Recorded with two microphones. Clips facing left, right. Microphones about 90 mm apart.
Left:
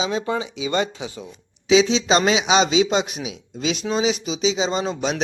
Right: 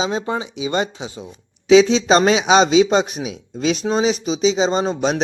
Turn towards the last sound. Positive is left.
turn(degrees=-35)  # may be behind; listen again after turning